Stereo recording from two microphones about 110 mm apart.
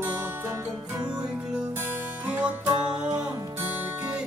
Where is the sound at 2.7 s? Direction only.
40° right (ahead or behind).